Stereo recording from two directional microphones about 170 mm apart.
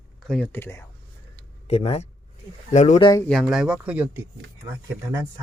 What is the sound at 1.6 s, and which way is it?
Speech, 35° left (ahead or behind).